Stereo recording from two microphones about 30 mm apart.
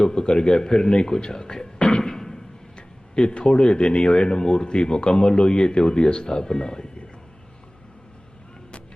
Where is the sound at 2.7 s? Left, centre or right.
Left.